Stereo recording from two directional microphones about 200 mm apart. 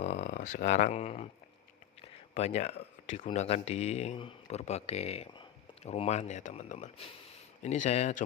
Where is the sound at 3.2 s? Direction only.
30° left (ahead or behind).